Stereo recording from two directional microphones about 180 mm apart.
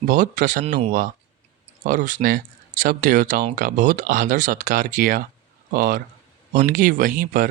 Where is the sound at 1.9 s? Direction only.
45° right (ahead or behind).